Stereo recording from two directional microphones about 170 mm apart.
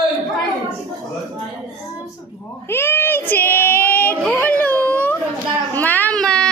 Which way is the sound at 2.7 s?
15° left (ahead or behind).